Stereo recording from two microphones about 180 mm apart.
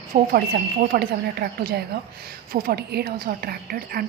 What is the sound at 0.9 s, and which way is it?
A woman's voice, 60° right (ahead or behind).